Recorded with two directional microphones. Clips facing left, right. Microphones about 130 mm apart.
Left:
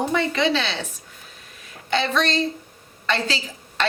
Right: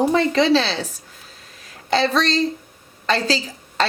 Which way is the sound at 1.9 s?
35° right (ahead or behind).